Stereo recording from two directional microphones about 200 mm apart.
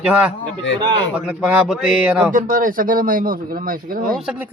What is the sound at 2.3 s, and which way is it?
Speech, 45° right (ahead or behind).